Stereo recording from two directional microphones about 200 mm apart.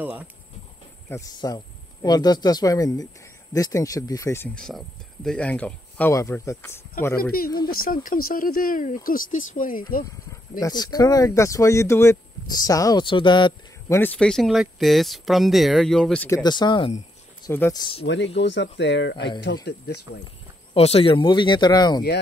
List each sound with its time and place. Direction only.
0.0 s speech: 10° right (ahead or behind)
1.0 s speech: 15° left (ahead or behind)
7.2 s speech: 45° left (ahead or behind)
10.6 s speech: 20° left (ahead or behind)
13.9 s speech: 5° left (ahead or behind)
16.4 s speech: 20° left (ahead or behind)
17.5 s speech: 10° left (ahead or behind)
18.0 s speech: 60° left (ahead or behind)
20.7 s speech: 30° left (ahead or behind)